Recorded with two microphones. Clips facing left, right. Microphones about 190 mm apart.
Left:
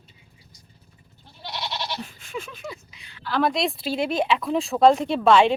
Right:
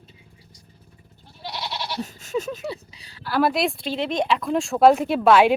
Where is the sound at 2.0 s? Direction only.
40° right (ahead or behind).